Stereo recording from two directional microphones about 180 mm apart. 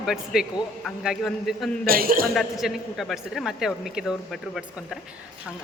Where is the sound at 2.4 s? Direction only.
Centre (ahead or behind).